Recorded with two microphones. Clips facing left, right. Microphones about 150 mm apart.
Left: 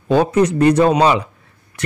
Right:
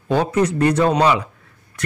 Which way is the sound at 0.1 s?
20° left (ahead or behind).